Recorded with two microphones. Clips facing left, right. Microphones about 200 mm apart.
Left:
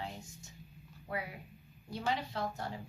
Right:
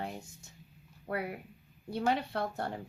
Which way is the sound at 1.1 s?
60° right (ahead or behind).